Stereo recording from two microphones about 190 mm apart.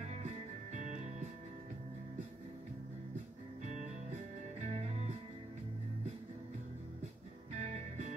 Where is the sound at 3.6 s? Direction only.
40° right (ahead or behind).